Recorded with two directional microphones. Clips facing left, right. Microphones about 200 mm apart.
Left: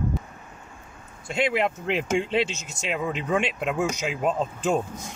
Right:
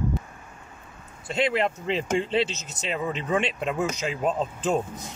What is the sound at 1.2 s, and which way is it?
Speech, centre (ahead or behind).